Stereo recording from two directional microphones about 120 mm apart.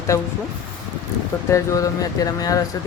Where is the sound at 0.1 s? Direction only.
25° left (ahead or behind).